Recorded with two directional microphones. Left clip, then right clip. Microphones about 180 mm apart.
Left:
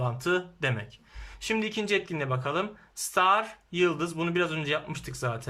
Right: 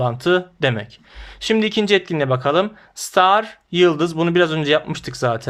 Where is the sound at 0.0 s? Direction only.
25° right (ahead or behind).